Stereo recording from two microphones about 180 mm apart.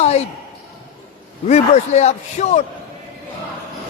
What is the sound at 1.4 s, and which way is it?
Speech, 40° left (ahead or behind).